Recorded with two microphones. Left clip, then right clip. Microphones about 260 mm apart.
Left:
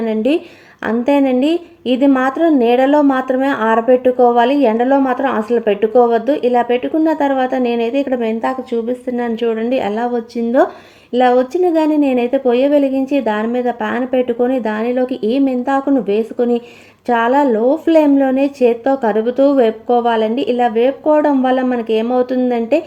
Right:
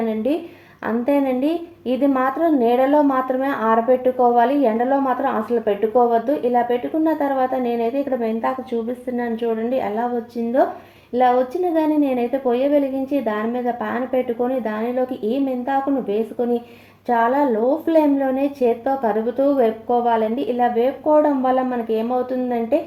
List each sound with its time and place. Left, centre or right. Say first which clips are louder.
0.0 s a woman's voice: left 6 dB; left
9.3 s a woman's voice: left 5 dB; left
11.2 s a woman's voice: left 5 dB; left